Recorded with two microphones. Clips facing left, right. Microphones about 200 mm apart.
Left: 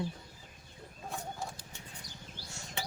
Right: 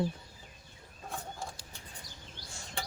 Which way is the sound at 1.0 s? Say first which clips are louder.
Left 1 dB; centre (ahead or behind).